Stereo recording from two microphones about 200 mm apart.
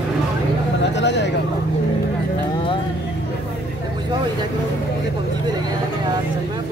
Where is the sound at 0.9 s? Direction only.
60° left (ahead or behind).